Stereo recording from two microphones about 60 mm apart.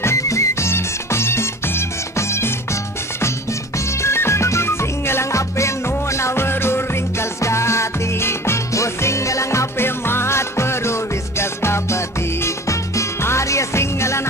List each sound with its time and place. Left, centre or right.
0.0 s music: left